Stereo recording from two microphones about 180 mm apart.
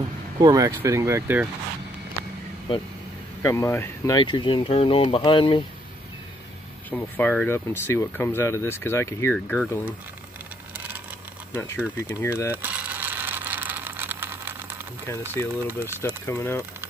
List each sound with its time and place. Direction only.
0.4 s speech: 20° right (ahead or behind)
3.4 s speech: 15° left (ahead or behind)
6.9 s speech: 10° left (ahead or behind)
11.5 s speech: 10° left (ahead or behind)
12.6 s a sound: 10° right (ahead or behind)
15.2 s speech: 15° right (ahead or behind)
16.3 s speech: 15° left (ahead or behind)